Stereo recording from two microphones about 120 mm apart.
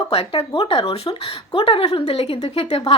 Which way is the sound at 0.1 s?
55° left (ahead or behind).